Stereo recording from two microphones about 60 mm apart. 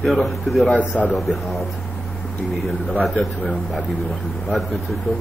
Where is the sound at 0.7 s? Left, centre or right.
Left.